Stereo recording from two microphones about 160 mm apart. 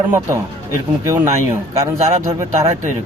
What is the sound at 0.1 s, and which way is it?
Speech, 15° right (ahead or behind).